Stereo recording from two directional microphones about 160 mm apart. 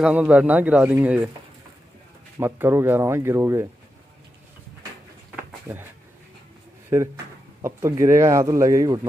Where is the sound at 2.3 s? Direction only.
15° right (ahead or behind).